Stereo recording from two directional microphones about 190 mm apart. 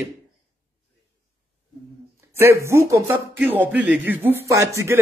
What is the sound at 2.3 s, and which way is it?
Speech, 10° right (ahead or behind).